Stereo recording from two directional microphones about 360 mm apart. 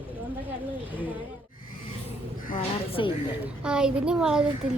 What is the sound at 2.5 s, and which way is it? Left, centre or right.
Speech, centre.